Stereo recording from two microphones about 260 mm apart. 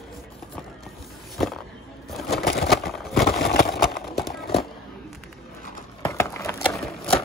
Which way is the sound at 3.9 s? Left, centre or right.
Centre.